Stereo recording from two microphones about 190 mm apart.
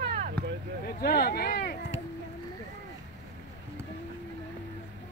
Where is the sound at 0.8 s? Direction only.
55° left (ahead or behind).